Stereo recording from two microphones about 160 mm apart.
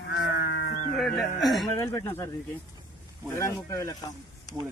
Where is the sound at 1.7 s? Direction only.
20° left (ahead or behind).